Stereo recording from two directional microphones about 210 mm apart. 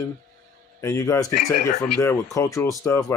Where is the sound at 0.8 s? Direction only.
15° left (ahead or behind).